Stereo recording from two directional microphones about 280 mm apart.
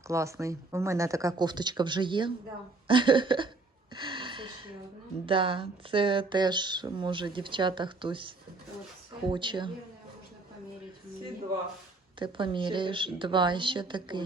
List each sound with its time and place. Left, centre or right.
0.1 s speech: centre
3.9 s a sound: centre
5.2 s speech: centre
9.3 s speech: centre
12.2 s speech: centre